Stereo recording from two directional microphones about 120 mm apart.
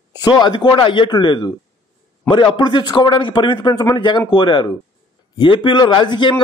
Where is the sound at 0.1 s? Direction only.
35° left (ahead or behind).